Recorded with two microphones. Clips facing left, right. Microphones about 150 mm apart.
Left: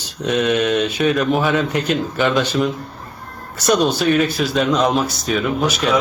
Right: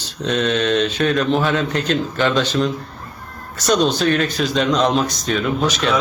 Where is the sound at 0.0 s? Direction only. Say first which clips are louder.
Left 1 dB; 10° left (ahead or behind).